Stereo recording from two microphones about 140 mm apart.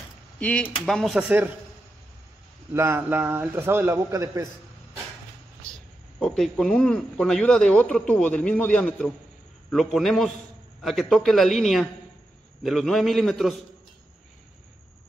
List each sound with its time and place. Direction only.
0.4 s a man's voice: 10° left (ahead or behind)
2.7 s a man's voice: 20° right (ahead or behind)
5.6 s a man's voice: 5° left (ahead or behind)